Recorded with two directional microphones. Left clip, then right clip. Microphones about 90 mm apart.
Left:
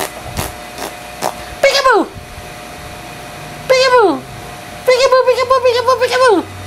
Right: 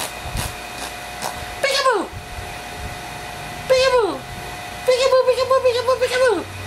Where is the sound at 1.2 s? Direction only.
25° left (ahead or behind).